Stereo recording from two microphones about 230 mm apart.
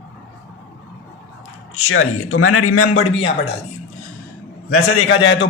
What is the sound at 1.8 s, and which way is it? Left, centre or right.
A man's voice, left.